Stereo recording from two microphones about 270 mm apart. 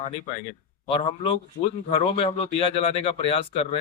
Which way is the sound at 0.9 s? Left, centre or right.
Centre.